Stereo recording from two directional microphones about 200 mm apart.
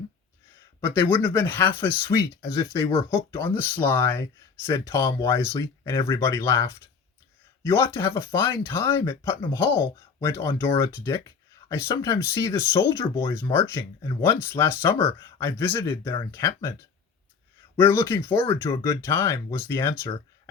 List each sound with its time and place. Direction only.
0.8 s speech: 10° left (ahead or behind)
17.7 s speech: 15° left (ahead or behind)